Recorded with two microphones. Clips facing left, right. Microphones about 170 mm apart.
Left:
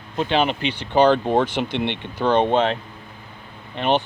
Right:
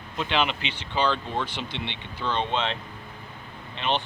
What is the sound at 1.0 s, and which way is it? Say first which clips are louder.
Speech: left 10 dB; 50° left (ahead or behind).